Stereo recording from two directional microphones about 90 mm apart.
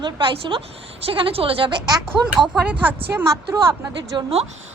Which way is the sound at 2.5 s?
15° right (ahead or behind).